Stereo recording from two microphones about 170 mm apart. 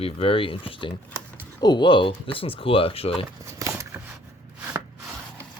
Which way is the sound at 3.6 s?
20° right (ahead or behind).